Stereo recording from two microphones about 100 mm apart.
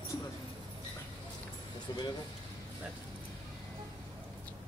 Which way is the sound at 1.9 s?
40° left (ahead or behind).